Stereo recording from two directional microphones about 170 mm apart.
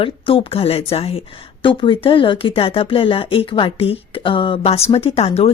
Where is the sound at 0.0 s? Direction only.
30° left (ahead or behind).